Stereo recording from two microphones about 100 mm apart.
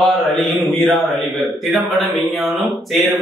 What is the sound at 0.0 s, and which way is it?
A man's voice, centre (ahead or behind).